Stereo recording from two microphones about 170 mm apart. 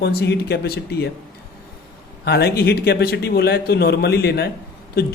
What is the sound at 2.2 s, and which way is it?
Speech, 70° left (ahead or behind).